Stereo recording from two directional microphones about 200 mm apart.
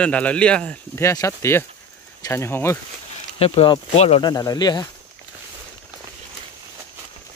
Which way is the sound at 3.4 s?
30° left (ahead or behind).